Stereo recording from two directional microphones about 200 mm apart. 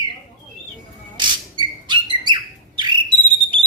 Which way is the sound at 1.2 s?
25° right (ahead or behind).